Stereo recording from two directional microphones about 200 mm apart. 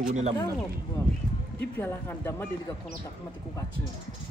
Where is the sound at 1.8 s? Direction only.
10° left (ahead or behind).